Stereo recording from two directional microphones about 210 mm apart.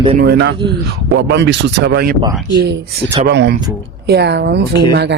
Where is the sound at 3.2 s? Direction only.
55° right (ahead or behind).